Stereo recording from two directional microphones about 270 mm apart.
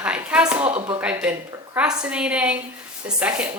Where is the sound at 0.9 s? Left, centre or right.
Centre.